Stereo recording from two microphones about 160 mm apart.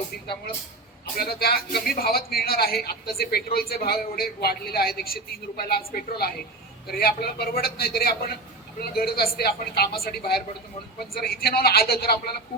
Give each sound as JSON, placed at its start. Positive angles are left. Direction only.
{"t": 1.2, "sound": "a woman's voice", "side_deg": 75}
{"t": 11.1, "sound": "a woman's voice", "side_deg": 75}